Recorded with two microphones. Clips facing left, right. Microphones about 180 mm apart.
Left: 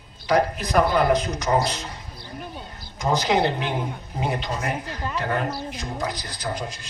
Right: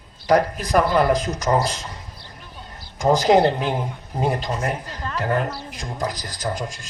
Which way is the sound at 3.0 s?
45° right (ahead or behind).